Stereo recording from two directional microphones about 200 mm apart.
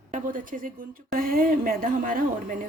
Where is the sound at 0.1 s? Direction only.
40° right (ahead or behind).